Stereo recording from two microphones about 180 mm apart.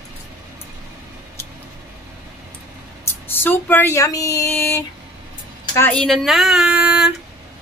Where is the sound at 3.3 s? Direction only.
10° left (ahead or behind); by 7.1 s 5° right (ahead or behind).